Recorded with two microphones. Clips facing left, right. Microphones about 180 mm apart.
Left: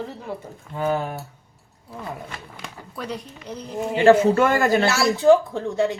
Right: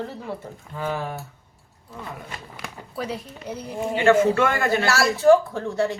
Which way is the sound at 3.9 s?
35° left (ahead or behind).